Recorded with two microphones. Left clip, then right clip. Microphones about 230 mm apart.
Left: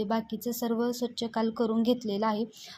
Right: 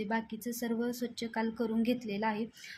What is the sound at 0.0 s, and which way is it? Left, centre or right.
A woman's voice, centre.